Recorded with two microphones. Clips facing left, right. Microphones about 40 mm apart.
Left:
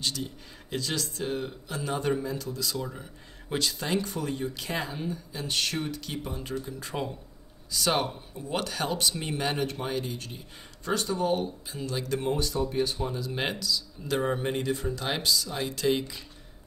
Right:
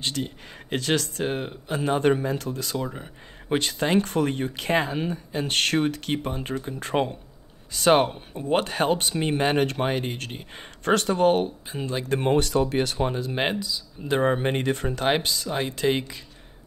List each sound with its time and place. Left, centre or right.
0.0 s speech: right
7.7 s speech: right
9.7 s speech: right
11.7 s speech: right
12.3 s speech: right
13.1 s speech: right
13.4 s speech: right